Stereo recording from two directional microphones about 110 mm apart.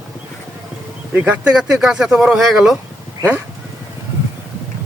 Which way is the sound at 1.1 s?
10° right (ahead or behind).